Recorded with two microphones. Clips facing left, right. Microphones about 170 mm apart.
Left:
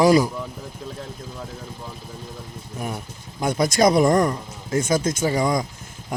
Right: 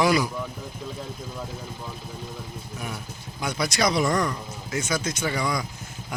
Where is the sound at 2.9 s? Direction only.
50° left (ahead or behind).